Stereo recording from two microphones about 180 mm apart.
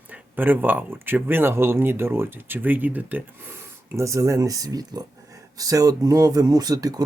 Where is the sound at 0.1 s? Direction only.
10° right (ahead or behind).